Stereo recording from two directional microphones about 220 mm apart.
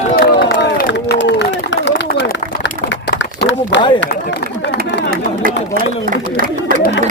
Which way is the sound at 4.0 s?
55° left (ahead or behind).